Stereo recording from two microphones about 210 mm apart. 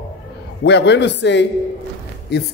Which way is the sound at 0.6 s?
55° left (ahead or behind).